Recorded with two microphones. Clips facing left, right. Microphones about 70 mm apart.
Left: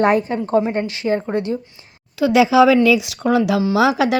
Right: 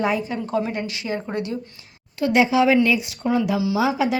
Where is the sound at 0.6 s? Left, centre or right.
Left.